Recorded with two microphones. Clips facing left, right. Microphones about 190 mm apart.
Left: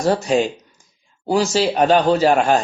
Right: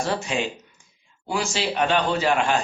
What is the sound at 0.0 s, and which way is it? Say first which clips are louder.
Speech: left 8 dB; 40° left (ahead or behind).